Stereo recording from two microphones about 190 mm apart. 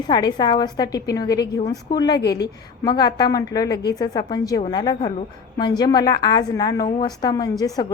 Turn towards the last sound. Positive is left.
turn(degrees=20)  # may be behind; listen again after turning